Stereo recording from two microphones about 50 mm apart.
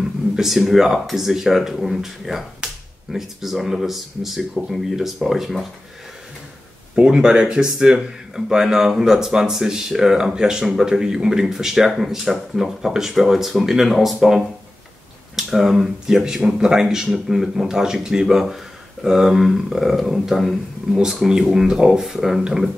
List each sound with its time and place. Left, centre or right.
0.4 s speech: centre
2.6 s a sound: centre
3.1 s speech: centre
7.0 s speech: centre